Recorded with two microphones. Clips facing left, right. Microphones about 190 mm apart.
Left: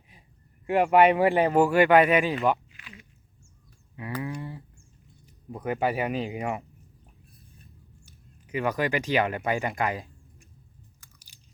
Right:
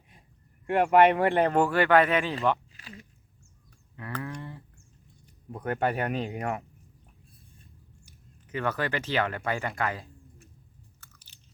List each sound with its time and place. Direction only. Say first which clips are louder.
0.7 s speech: left 1 dB; centre (ahead or behind)
2.7 s a sound: right 3 dB; 35° right (ahead or behind)
3.9 s a sound: left 3 dB; 15° left (ahead or behind)
5.5 s speech: left 1 dB; 5° left (ahead or behind)
8.4 s speech: left 3 dB; 10° left (ahead or behind)
11.0 s biting: even; 10° left (ahead or behind)